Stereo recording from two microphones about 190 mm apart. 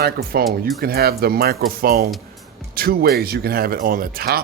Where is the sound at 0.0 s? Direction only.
55° right (ahead or behind).